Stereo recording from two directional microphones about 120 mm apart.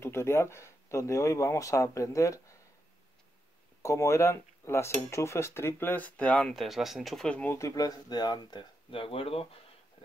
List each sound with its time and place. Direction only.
0.0 s speech: 20° left (ahead or behind)
3.8 s speech: 25° left (ahead or behind)
7.5 s speech: 30° left (ahead or behind); by 9.5 s 50° left (ahead or behind)